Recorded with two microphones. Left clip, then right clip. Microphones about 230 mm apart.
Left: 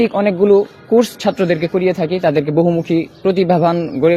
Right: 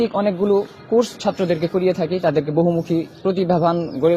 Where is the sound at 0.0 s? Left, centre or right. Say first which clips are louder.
Left 5 dB; left.